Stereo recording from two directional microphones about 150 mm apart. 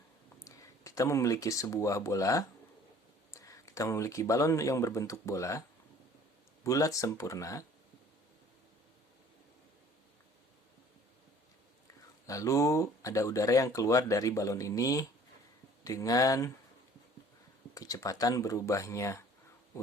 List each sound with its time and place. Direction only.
0.4 s speech: 20° left (ahead or behind)
6.7 s speech: 20° left (ahead or behind)
12.2 s speech: 20° left (ahead or behind)
17.7 s speech: 25° left (ahead or behind)